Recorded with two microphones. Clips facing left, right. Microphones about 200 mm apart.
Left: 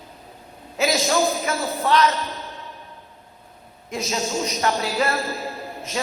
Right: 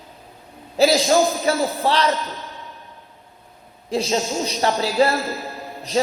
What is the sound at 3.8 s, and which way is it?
A man's voice, 30° right (ahead or behind).